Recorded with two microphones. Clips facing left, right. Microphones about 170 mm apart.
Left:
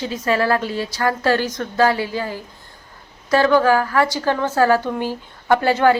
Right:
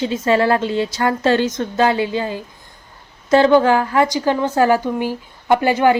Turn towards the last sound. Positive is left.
turn(degrees=-15)  # may be behind; listen again after turning